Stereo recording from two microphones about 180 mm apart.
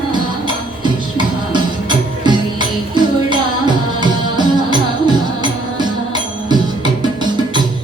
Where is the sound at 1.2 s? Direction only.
25° right (ahead or behind).